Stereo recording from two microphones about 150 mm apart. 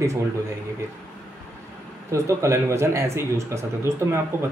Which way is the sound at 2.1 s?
20° right (ahead or behind).